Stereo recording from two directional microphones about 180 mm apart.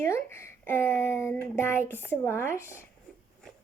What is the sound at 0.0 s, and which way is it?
Speech, 15° left (ahead or behind).